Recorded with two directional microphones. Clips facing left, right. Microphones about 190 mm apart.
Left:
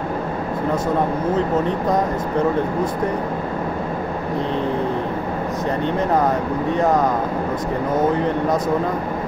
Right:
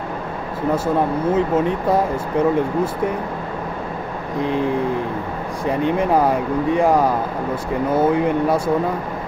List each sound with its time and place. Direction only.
1.3 s speech: 10° right (ahead or behind)
5.7 s speech: 10° right (ahead or behind)